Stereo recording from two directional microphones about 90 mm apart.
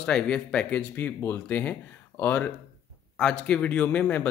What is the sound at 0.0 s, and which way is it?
Speech, 10° left (ahead or behind).